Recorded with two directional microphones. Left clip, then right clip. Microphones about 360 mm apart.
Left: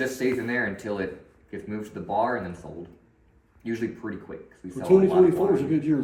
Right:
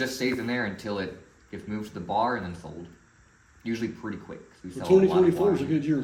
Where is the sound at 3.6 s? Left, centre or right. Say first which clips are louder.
Left 2 dB; centre.